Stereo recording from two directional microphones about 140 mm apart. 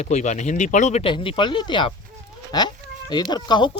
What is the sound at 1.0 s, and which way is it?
Speech, 40° left (ahead or behind).